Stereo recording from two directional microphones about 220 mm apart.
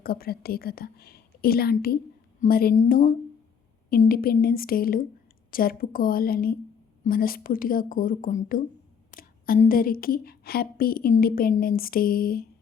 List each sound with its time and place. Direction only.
0.0 s a woman's voice: 45° left (ahead or behind)